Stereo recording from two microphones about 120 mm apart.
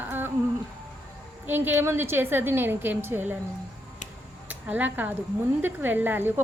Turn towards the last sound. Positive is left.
turn(degrees=-15)  # may be behind; listen again after turning